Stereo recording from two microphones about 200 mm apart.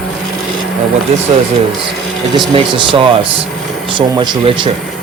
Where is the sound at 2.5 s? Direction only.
25° right (ahead or behind).